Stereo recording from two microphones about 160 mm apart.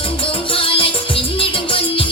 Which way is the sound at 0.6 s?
35° left (ahead or behind).